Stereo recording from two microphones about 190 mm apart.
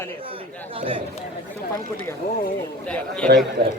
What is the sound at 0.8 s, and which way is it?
Speech, 30° right (ahead or behind).